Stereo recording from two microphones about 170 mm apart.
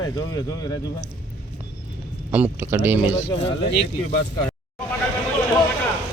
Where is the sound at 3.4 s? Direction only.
90° left.